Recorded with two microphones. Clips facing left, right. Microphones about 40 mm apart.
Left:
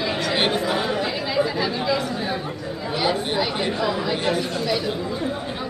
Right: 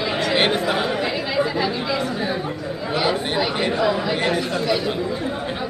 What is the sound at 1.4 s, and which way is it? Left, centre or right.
Chatter, centre.